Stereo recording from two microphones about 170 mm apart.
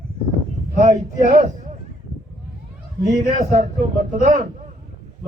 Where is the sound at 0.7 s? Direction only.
45° right (ahead or behind).